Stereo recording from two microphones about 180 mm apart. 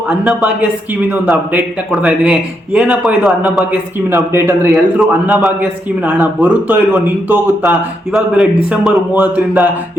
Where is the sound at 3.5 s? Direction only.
10° right (ahead or behind).